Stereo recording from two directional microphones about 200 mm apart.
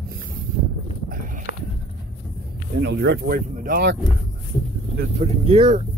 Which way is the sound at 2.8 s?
55° right (ahead or behind).